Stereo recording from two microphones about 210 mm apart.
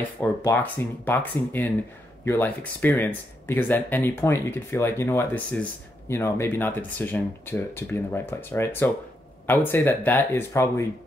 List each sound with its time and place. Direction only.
0.2 s speech: 10° left (ahead or behind)